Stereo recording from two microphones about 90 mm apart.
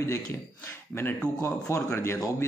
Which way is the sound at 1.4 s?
35° left (ahead or behind).